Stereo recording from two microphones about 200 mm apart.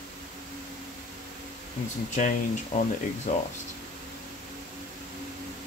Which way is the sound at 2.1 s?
40° left (ahead or behind).